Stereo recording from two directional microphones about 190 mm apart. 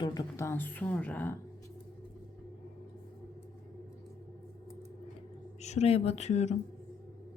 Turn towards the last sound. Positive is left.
turn(degrees=35)  # may be behind; listen again after turning